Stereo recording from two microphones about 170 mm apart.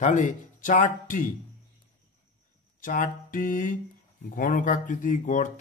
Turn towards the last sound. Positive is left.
turn(degrees=50)  # may be behind; listen again after turning